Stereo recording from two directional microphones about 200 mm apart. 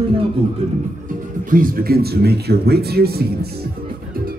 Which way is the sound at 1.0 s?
40° right (ahead or behind).